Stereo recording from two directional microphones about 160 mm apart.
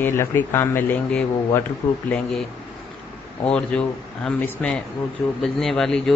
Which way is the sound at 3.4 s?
5° left (ahead or behind).